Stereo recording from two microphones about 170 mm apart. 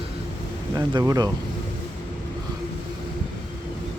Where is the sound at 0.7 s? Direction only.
20° right (ahead or behind).